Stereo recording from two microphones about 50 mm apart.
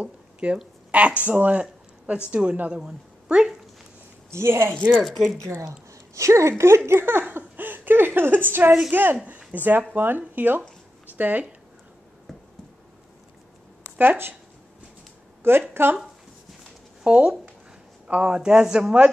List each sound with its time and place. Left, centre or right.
0.0 s a woman's voice: right
2.8 s a sound: centre
4.3 s speech: right
5.0 s speech: centre
5.4 s speech: right
6.9 s speech: right
12.3 s a sound: centre
13.9 s speech: right
15.7 s speech: right
17.0 s a woman's voice: centre